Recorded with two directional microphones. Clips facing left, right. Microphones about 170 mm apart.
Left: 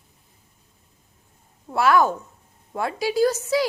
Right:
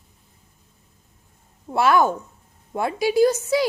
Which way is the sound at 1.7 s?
25° right (ahead or behind).